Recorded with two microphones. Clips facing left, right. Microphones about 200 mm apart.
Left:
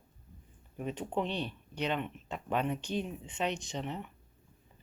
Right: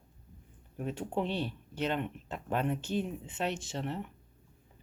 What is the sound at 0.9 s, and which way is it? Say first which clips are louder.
Speech: right 1 dB; 10° right (ahead or behind).